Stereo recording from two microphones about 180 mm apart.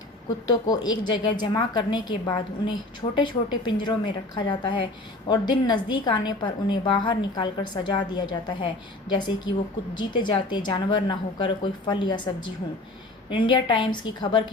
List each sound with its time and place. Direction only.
0.4 s a woman's voice: 25° left (ahead or behind)
13.3 s a woman's voice: 25° left (ahead or behind)